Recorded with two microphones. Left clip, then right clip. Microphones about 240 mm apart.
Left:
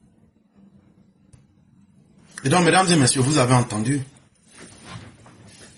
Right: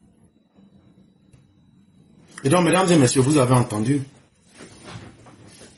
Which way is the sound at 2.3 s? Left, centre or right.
Left.